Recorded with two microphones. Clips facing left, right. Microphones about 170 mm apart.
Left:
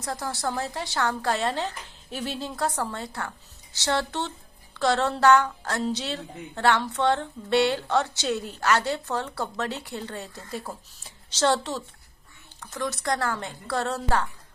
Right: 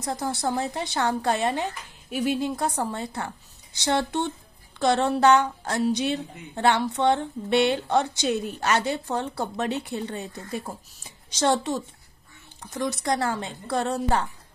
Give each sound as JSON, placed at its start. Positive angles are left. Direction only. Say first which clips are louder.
{"t": 0.0, "sound": "a woman's voice", "louder": "right 3 dB", "side_deg": -20}